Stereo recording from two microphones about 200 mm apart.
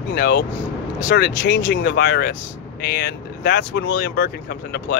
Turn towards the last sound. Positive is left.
turn(degrees=55)  # may be behind; listen again after turning